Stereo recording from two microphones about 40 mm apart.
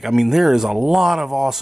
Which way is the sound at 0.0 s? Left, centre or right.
Centre.